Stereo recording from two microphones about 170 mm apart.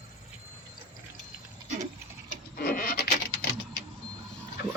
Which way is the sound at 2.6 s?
60° left (ahead or behind).